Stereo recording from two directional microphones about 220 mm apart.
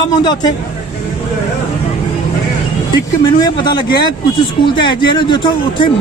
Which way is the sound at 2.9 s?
20° left (ahead or behind).